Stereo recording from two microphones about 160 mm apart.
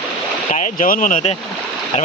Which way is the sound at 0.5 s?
55° left (ahead or behind).